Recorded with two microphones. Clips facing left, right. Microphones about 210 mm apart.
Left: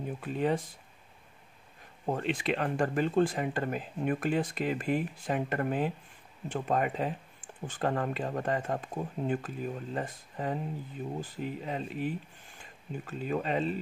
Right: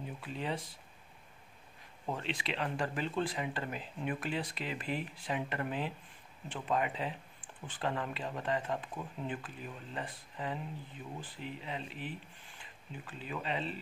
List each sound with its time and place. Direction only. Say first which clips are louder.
0.2 s speech: left 9 dB; 50° left (ahead or behind)
2.0 s speech: left 8 dB; 50° left (ahead or behind)